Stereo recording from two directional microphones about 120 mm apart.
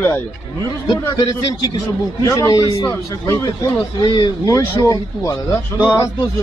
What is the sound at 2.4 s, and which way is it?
A man's voice, 30° left (ahead or behind).